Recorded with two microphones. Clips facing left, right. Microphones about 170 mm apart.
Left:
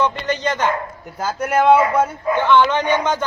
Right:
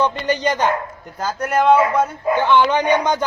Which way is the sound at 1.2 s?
10° left (ahead or behind).